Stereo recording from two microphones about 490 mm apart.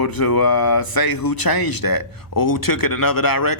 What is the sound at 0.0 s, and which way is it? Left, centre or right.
Speech, left.